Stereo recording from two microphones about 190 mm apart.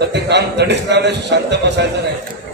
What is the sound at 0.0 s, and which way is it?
A man's voice, 65° right (ahead or behind).